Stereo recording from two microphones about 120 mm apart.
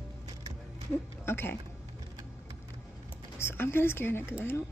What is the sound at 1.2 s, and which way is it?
Speech, 20° left (ahead or behind).